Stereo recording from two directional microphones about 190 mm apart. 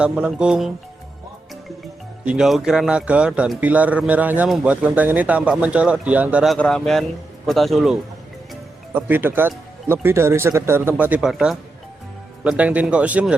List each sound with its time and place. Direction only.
0.0 s speech: 5° right (ahead or behind)
2.2 s speech: 5° right (ahead or behind)
9.0 s speech: 10° right (ahead or behind)